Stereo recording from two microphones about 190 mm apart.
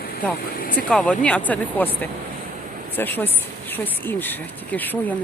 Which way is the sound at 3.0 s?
10° left (ahead or behind).